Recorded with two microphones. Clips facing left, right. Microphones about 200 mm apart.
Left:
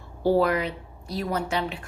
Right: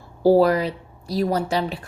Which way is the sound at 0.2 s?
35° right (ahead or behind).